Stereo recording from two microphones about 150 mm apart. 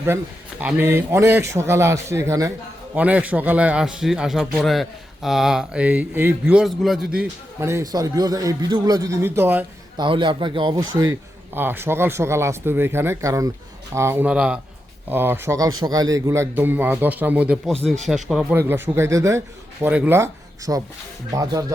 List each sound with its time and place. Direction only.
0.6 s a man's voice: 10° right (ahead or behind)
2.9 s a man's voice: 10° right (ahead or behind)
7.7 s a man's voice: 20° right (ahead or behind)
10.0 s a man's voice: 30° right (ahead or behind); by 17.6 s 10° right (ahead or behind)
17.8 s a man's voice: centre (ahead or behind)
18.5 s a man's voice: 15° right (ahead or behind)